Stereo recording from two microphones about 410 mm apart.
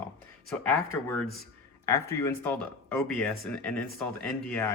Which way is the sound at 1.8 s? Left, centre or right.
Centre.